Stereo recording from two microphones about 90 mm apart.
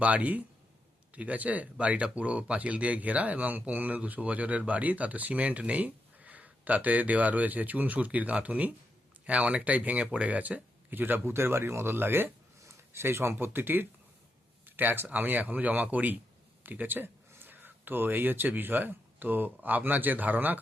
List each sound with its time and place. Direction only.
0.0 s speech: 15° right (ahead or behind)